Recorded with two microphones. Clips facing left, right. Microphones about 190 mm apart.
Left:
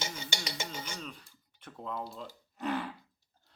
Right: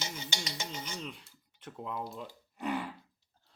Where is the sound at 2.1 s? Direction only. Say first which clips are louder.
Right 1 dB; 10° right (ahead or behind).